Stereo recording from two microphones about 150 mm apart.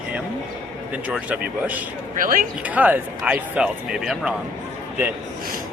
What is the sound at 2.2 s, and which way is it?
Speech, 65° right (ahead or behind).